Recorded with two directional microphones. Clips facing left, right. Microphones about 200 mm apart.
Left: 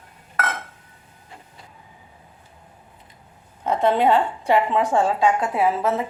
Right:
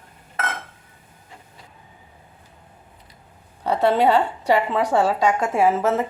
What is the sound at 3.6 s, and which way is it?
A woman's voice, 35° right (ahead or behind).